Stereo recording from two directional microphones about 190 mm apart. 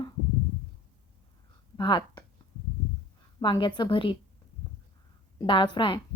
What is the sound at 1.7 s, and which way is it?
Speech, 25° left (ahead or behind).